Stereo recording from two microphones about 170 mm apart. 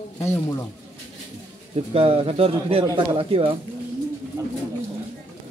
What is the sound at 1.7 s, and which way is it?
Speech, 35° right (ahead or behind).